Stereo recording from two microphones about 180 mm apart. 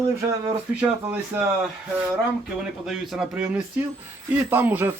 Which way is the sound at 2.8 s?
Centre (ahead or behind).